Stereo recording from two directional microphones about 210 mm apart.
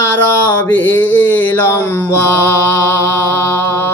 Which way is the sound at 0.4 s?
10° left (ahead or behind).